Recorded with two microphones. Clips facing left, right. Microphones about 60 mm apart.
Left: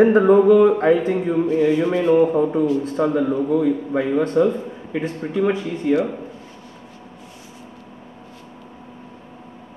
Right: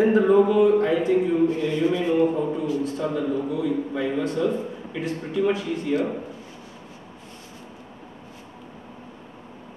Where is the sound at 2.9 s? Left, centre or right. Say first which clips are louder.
Left 6 dB; left.